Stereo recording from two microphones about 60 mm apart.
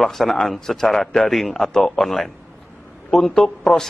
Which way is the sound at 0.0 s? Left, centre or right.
Centre.